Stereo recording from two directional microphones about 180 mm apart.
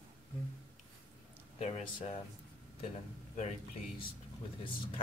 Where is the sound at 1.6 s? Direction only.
35° left (ahead or behind).